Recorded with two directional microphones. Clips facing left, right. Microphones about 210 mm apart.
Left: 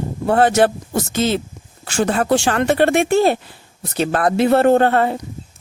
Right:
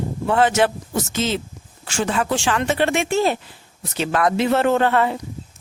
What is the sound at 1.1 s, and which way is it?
Speech, 55° left (ahead or behind).